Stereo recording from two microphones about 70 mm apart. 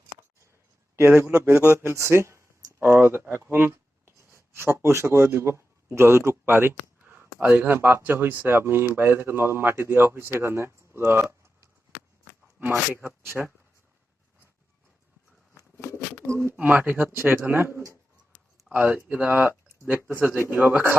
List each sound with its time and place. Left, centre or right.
0.9 s speech: right
2.8 s speech: right
13.0 s speech: right
15.8 s bird: left
16.2 s speech: right
16.6 s speech: right
18.7 s speech: right
19.3 s speech: right